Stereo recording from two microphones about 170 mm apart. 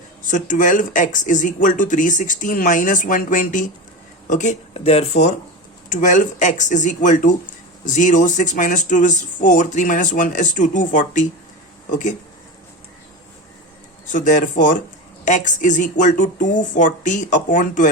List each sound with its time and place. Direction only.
0.3 s speech: 50° left (ahead or behind)
14.1 s speech: 45° left (ahead or behind)